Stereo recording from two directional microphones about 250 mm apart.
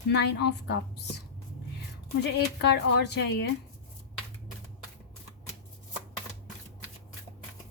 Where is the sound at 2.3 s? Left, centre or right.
Left.